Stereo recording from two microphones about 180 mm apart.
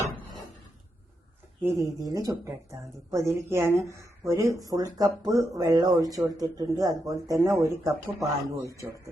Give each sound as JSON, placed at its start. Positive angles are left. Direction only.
{"t": 1.6, "sound": "speech", "side_deg": -20}